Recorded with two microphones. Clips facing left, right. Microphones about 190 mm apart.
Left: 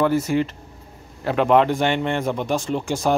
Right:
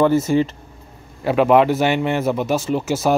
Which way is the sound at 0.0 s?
25° right (ahead or behind).